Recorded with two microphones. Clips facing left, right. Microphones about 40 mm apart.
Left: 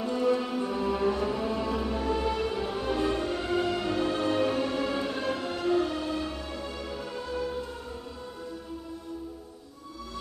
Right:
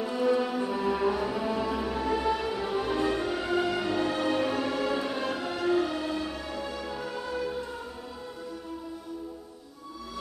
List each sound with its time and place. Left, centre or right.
0.0 s music: centre